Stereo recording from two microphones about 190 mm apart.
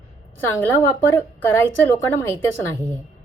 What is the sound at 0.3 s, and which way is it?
Speech, 10° left (ahead or behind).